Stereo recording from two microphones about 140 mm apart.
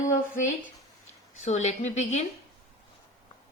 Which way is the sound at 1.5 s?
55° left (ahead or behind).